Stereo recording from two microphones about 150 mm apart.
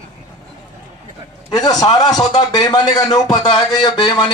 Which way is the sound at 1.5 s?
25° left (ahead or behind).